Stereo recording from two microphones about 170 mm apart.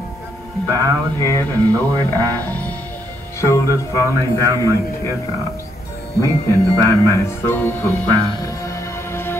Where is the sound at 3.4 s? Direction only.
15° left (ahead or behind).